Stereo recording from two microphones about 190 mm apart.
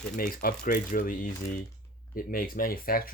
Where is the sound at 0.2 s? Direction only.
50° left (ahead or behind).